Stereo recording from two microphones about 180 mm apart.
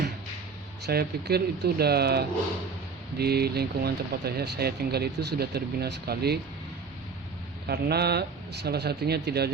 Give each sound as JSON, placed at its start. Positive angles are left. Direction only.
{"t": 0.9, "sound": "speech", "side_deg": -60}
{"t": 7.7, "sound": "speech", "side_deg": -60}